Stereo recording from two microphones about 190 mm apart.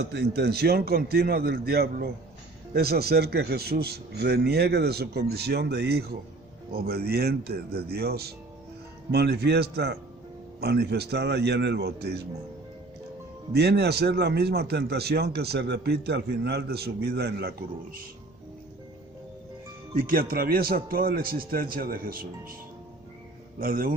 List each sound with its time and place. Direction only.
0.0 s a man's voice: 60° right (ahead or behind)
13.5 s a man's voice: 60° right (ahead or behind)
20.0 s a man's voice: 50° right (ahead or behind)
23.6 s a man's voice: 50° right (ahead or behind)